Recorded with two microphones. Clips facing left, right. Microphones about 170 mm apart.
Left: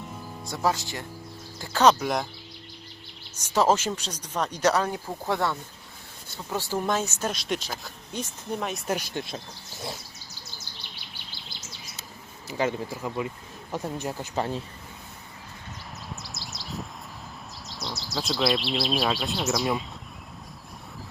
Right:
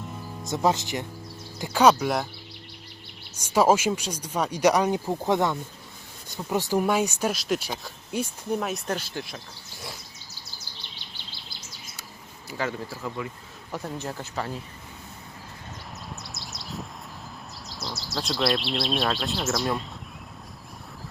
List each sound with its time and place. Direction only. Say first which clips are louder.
0.4 s speech: right 3 dB; 20° right (ahead or behind); by 2.2 s centre (ahead or behind)
3.4 s speech: right 2 dB; 10° right (ahead or behind)
8.9 s speech: left 1 dB; 15° left (ahead or behind)
12.5 s speech: left 3 dB; 20° left (ahead or behind)
16.0 s a sound: even; centre (ahead or behind)
17.7 s speech: even; centre (ahead or behind)